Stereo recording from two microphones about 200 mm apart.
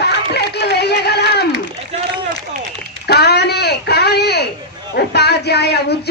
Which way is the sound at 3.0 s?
55° left (ahead or behind).